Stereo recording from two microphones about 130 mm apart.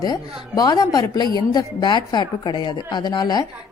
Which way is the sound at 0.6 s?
30° left (ahead or behind).